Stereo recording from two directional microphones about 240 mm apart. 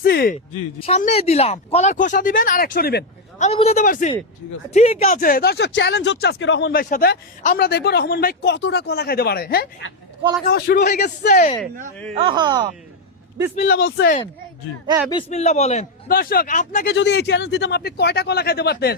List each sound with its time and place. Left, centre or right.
0.0 s speech: left
0.8 s speech: left
12.1 s speech: right
13.7 s speech: left
15.1 s speech: left
16.9 s speech: left